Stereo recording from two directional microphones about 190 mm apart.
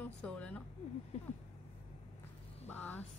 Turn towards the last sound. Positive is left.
turn(degrees=10)  # may be behind; listen again after turning